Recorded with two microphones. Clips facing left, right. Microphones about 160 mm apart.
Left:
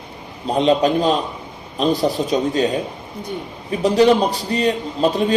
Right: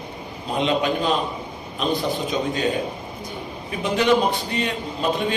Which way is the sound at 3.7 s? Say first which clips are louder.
Left 6 dB; 35° left (ahead or behind).